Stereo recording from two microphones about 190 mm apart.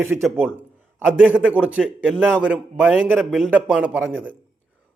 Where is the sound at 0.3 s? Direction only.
10° right (ahead or behind).